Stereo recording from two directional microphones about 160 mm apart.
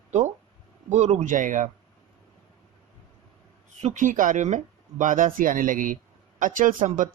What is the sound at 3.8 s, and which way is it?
Speech, 50° right (ahead or behind).